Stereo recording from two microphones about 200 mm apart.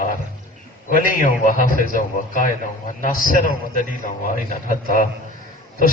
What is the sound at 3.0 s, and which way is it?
A man's voice, 45° left (ahead or behind).